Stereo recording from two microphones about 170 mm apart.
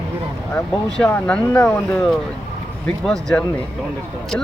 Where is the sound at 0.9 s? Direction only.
5° left (ahead or behind).